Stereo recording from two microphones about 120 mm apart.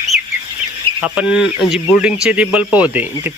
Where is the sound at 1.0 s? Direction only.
10° right (ahead or behind).